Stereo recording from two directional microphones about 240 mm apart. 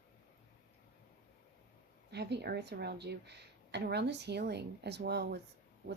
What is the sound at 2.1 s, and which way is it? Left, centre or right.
A woman's voice, right.